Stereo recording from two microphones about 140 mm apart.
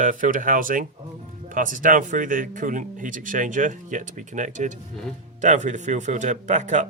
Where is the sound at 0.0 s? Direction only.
70° right (ahead or behind).